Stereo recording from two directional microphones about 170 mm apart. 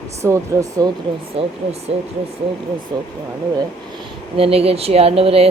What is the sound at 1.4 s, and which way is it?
Speech, 35° right (ahead or behind).